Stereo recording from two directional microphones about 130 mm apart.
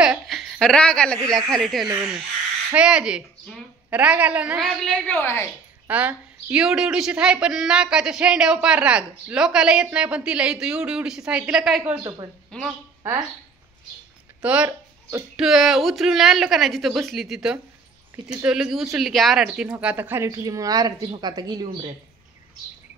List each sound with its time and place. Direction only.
0.0 s a sound: centre (ahead or behind)
1.6 s a woman's voice: centre (ahead or behind)
4.6 s a woman's voice: 5° left (ahead or behind)
5.9 s speech: 15° right (ahead or behind)
12.0 s a woman's voice: 25° right (ahead or behind)
12.4 s speech: 5° left (ahead or behind)
14.4 s a sound: 10° right (ahead or behind)
15.3 s a woman's voice: 5° right (ahead or behind); by 21.6 s 30° right (ahead or behind)